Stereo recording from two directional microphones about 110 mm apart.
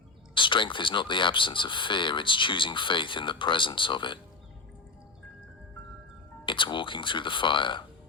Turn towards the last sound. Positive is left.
turn(degrees=50)  # may be behind; listen again after turning